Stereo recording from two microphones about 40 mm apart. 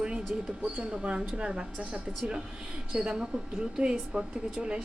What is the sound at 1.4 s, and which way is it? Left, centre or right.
Speech, right.